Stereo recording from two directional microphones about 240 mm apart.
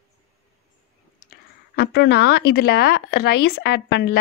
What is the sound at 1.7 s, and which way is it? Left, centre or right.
Speech, left.